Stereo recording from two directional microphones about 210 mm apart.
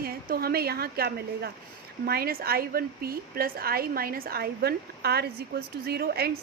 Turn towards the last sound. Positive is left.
turn(degrees=-50)  # may be behind; listen again after turning